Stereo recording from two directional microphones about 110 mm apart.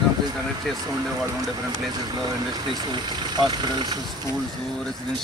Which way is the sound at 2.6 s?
45° right (ahead or behind).